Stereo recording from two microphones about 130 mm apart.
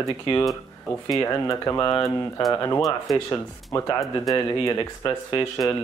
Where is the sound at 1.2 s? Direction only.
20° left (ahead or behind).